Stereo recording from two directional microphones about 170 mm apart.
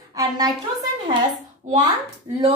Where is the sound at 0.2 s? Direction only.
20° right (ahead or behind).